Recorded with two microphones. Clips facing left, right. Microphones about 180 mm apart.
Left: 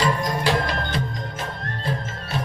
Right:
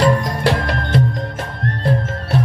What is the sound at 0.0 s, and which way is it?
Music, 70° right (ahead or behind).